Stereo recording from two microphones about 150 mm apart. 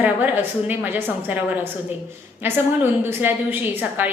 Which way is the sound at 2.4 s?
15° right (ahead or behind).